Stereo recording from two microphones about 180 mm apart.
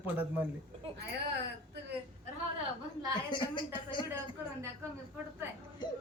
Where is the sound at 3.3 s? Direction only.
25° left (ahead or behind).